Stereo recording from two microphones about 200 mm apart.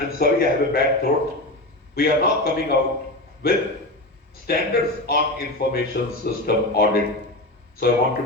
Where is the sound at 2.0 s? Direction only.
50° left (ahead or behind).